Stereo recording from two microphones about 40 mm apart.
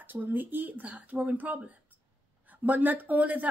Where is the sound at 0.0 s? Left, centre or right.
Right.